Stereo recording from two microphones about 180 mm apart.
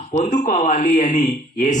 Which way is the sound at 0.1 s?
40° left (ahead or behind).